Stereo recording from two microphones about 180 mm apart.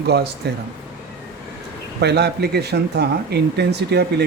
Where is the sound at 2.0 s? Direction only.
65° right (ahead or behind).